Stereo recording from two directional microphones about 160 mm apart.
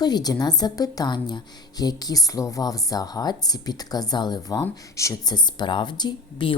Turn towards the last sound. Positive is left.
turn(degrees=30)  # may be behind; listen again after turning